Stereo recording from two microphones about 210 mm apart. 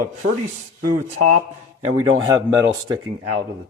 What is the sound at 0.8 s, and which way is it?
Speech, 40° right (ahead or behind).